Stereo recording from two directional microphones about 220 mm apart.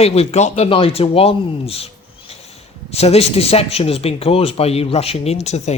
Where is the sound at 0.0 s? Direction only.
25° left (ahead or behind).